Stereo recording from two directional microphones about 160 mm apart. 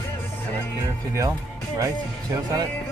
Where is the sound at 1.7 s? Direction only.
20° right (ahead or behind).